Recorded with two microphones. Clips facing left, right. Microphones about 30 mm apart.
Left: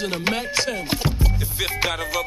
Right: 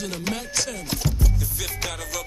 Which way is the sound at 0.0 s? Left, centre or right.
Left.